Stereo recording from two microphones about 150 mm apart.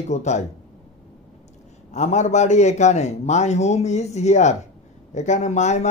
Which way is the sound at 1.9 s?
50° left (ahead or behind).